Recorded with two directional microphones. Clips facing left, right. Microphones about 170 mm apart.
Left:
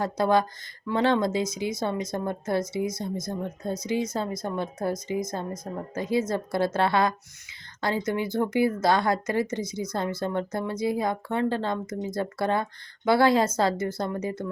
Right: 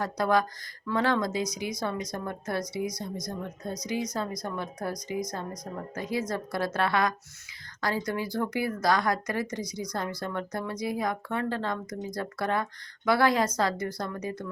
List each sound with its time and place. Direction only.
0.0 s speech: 25° left (ahead or behind)